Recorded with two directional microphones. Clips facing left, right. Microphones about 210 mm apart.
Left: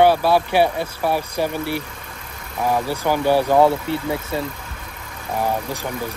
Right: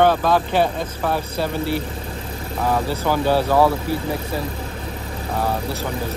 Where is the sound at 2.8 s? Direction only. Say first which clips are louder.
Left 1 dB; 15° left (ahead or behind).